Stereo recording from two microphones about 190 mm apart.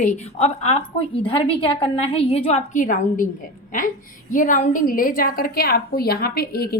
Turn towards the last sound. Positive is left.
turn(degrees=55)  # may be behind; listen again after turning